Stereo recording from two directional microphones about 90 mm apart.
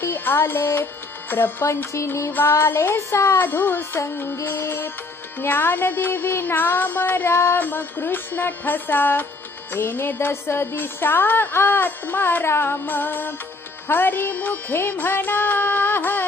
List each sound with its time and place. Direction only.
0.0 s music: 25° left (ahead or behind)